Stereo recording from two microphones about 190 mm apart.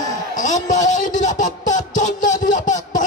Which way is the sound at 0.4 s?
40° left (ahead or behind).